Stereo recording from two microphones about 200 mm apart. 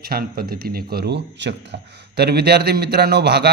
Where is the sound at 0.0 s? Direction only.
50° right (ahead or behind).